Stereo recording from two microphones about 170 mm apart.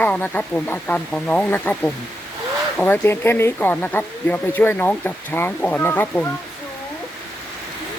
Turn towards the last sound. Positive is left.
turn(degrees=10)  # may be behind; listen again after turning